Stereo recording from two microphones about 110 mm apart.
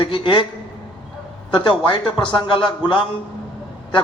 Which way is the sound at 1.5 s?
45° left (ahead or behind).